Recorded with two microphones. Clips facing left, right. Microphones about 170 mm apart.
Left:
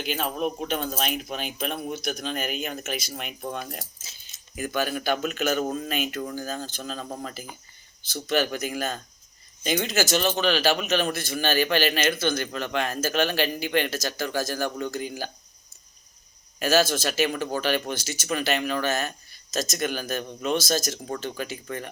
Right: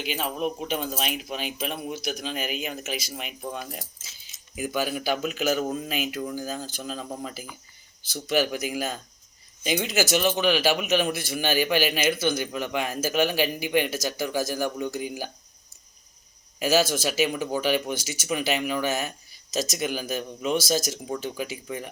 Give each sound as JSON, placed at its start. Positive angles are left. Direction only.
{"t": 0.2, "sound": "speech", "side_deg": 0}
{"t": 1.9, "sound": "a man's voice", "side_deg": 50}
{"t": 3.1, "sound": "speech", "side_deg": -5}
{"t": 4.5, "sound": "a man's voice", "side_deg": -10}
{"t": 16.6, "sound": "a man's voice", "side_deg": -15}